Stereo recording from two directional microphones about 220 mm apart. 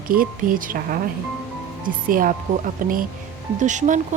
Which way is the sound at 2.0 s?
40° right (ahead or behind).